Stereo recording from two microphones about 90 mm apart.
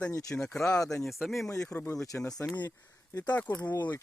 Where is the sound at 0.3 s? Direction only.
10° left (ahead or behind).